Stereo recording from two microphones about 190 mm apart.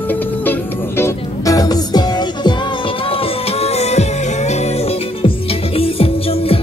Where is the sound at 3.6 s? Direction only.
35° left (ahead or behind).